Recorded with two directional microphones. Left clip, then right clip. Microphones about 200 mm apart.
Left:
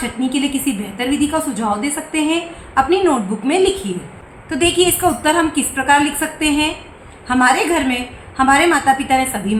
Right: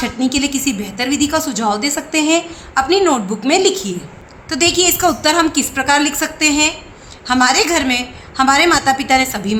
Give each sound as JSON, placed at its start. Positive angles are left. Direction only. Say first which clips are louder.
{"t": 0.0, "sound": "a woman's voice", "louder": "right 2 dB", "side_deg": -45}